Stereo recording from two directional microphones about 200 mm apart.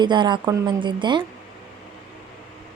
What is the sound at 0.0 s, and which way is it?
A woman's voice, 20° right (ahead or behind).